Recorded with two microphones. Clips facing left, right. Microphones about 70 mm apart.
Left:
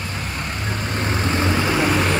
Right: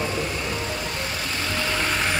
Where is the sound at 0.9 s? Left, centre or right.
Left.